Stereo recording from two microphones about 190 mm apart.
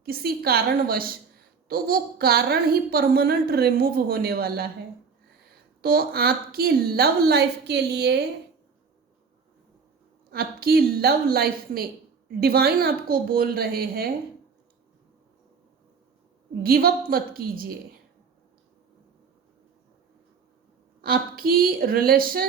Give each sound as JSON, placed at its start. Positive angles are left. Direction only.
{"t": 0.0, "sound": "a woman's voice", "side_deg": -55}
{"t": 5.8, "sound": "a woman's voice", "side_deg": -50}
{"t": 10.3, "sound": "a woman's voice", "side_deg": -55}
{"t": 16.6, "sound": "a woman's voice", "side_deg": -50}
{"t": 21.0, "sound": "a woman's voice", "side_deg": -50}